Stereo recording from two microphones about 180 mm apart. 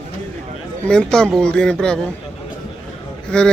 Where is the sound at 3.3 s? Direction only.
5° left (ahead or behind).